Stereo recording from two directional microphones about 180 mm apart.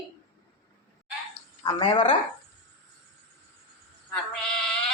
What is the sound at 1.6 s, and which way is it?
Speech, 30° left (ahead or behind).